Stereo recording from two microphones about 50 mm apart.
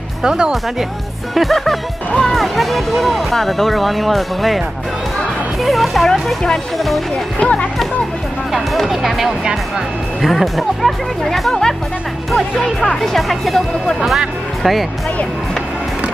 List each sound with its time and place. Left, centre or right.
0.2 s speech: centre
1.3 s speech: centre
7.3 s speech: left
8.5 s speech: centre
10.2 s speech: centre